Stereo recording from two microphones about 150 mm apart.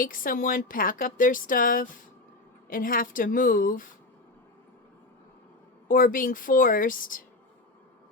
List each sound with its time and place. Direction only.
0.0 s a woman's voice: 70° left (ahead or behind)
5.9 s a woman's voice: 65° left (ahead or behind)